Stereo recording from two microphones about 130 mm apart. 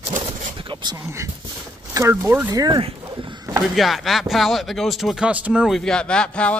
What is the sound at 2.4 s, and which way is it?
Speech, 30° right (ahead or behind).